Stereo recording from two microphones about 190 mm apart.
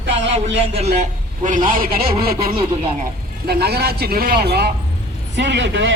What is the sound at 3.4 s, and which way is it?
Speech, 55° right (ahead or behind).